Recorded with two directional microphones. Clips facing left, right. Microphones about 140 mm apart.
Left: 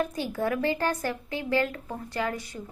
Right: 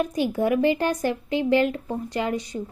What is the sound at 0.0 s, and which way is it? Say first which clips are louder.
Speech: right 5 dB; 15° right (ahead or behind).